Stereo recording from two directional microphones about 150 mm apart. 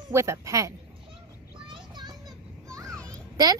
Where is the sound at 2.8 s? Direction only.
5° left (ahead or behind).